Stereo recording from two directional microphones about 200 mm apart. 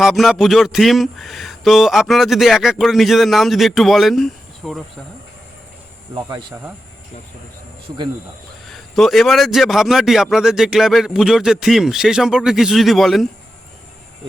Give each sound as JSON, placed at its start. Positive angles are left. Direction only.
{"t": 0.0, "sound": "speech", "side_deg": 0}
{"t": 6.1, "sound": "speech", "side_deg": -20}
{"t": 8.6, "sound": "speech", "side_deg": 0}